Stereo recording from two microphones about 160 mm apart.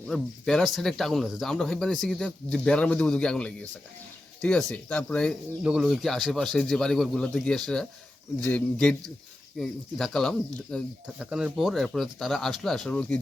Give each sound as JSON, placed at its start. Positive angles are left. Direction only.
{"t": 0.1, "sound": "speech", "side_deg": 0}
{"t": 5.6, "sound": "speech", "side_deg": -5}